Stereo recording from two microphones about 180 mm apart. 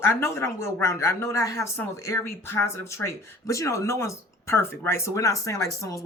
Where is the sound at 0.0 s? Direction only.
15° left (ahead or behind).